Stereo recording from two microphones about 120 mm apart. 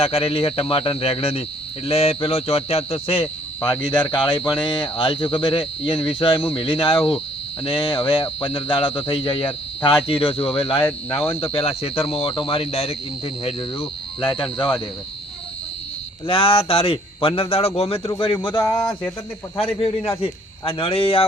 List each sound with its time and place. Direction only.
0.0 s a man's voice: 55° left (ahead or behind)
3.6 s speech: 10° left (ahead or behind)
4.7 s speech: 45° left (ahead or behind)
16.2 s speech: 50° left (ahead or behind)
18.6 s speech: 35° left (ahead or behind)
19.5 s speech: 50° left (ahead or behind)